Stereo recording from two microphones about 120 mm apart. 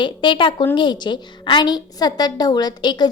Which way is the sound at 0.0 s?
40° left (ahead or behind).